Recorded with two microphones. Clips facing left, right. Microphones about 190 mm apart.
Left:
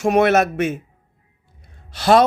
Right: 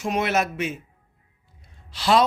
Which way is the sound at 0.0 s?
60° left (ahead or behind).